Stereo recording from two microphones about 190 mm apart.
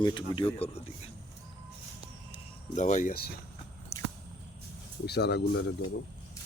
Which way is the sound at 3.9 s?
15° left (ahead or behind).